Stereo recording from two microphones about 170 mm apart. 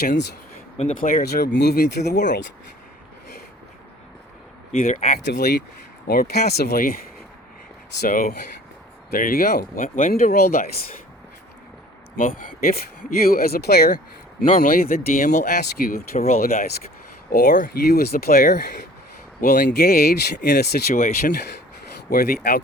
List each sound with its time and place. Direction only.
0.0 s speech: 70° left (ahead or behind)
0.9 s speech: 55° left (ahead or behind); by 2.5 s 85° left
4.8 s speech: 55° left (ahead or behind)
5.2 s speech: 80° left
6.1 s speech: 65° left (ahead or behind)
12.1 s speech: 50° left (ahead or behind)
16.0 s speech: 40° left (ahead or behind)
16.3 s speech: 55° left (ahead or behind)
19.4 s speech: 50° left (ahead or behind)
19.6 s speech: 70° left (ahead or behind); by 21.3 s 55° left (ahead or behind)
22.1 s speech: 65° left (ahead or behind)